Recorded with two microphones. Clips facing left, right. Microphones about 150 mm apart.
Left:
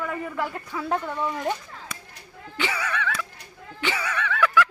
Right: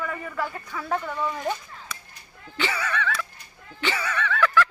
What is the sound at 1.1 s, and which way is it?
Speech, centre (ahead or behind).